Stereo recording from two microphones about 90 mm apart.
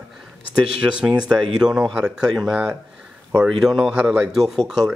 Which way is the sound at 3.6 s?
Centre (ahead or behind).